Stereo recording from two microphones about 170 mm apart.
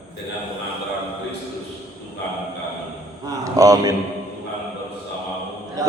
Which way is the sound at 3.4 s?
20° right (ahead or behind).